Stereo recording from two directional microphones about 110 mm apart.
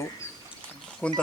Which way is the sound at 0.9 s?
10° left (ahead or behind).